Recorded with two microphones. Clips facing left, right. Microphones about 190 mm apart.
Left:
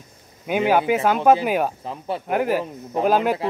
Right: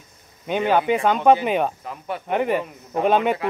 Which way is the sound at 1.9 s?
30° left (ahead or behind).